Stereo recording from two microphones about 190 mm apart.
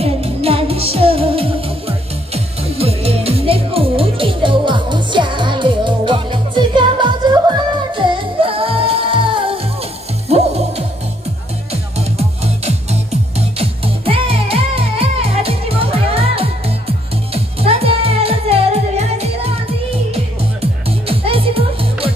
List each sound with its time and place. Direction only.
0.0 s music: 30° right (ahead or behind)
21.1 s music: 30° right (ahead or behind)